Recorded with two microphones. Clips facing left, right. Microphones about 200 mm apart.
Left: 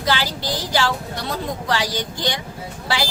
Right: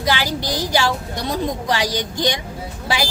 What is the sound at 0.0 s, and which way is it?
A woman's voice, 15° right (ahead or behind).